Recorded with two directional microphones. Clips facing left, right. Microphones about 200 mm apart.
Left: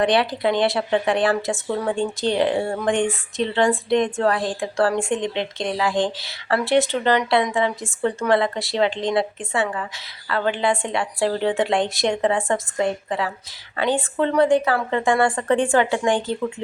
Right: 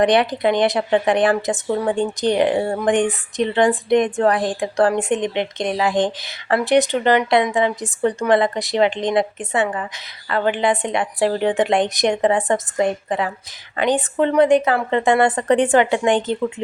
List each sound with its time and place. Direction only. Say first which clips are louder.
0.0 s a woman's voice: right 3 dB; 20° right (ahead or behind)